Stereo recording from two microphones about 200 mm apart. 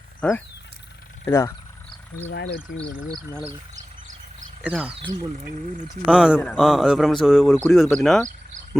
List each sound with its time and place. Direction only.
0.2 s speech: 5° left (ahead or behind)
2.3 s speech: 75° left (ahead or behind)
4.6 s speech: 5° right (ahead or behind)
5.9 s speech: 5° right (ahead or behind)